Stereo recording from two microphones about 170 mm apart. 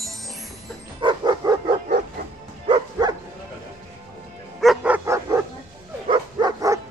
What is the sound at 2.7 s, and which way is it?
Bow-wow, 25° right (ahead or behind).